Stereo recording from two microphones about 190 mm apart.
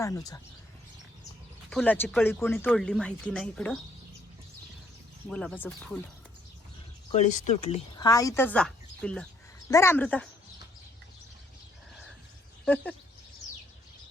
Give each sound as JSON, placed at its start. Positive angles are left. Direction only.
{"t": 0.0, "sound": "speech", "side_deg": 20}
{"t": 1.7, "sound": "speech", "side_deg": 10}
{"t": 5.3, "sound": "speech", "side_deg": 5}
{"t": 7.1, "sound": "speech", "side_deg": 40}
{"t": 7.9, "sound": "a woman's voice", "side_deg": 20}
{"t": 9.6, "sound": "speech", "side_deg": 15}
{"t": 12.6, "sound": "speech", "side_deg": 5}